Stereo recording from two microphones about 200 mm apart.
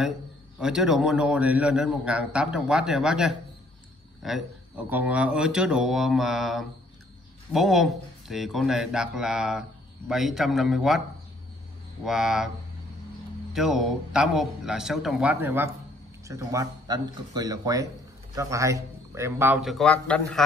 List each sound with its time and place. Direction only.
0.6 s a man's voice: 5° right (ahead or behind)
12.0 s a man's voice: centre (ahead or behind)
13.5 s a man's voice: centre (ahead or behind)